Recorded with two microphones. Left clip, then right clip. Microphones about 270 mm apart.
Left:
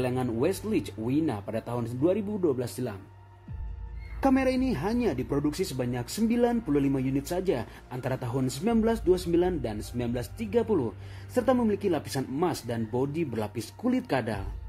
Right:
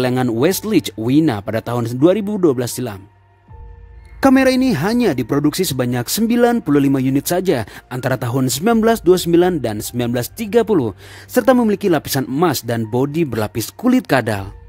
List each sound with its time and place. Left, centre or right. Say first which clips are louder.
0.0 s speech: right 12 dB; right
4.2 s speech: right 12 dB; right